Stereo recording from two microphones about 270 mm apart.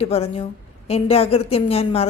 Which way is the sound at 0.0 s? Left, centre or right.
Left.